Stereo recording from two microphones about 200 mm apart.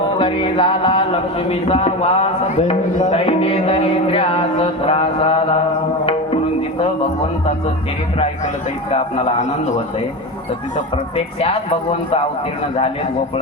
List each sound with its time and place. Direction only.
0.2 s speech: 25° left (ahead or behind)
6.1 s music: 30° left (ahead or behind)
8.9 s a man's voice: 30° left (ahead or behind)
10.9 s speech: 30° left (ahead or behind)